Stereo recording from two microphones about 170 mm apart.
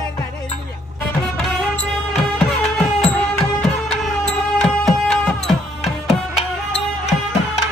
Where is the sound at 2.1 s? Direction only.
5° left (ahead or behind).